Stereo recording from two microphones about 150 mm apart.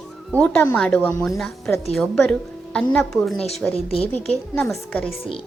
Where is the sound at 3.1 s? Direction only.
5° left (ahead or behind).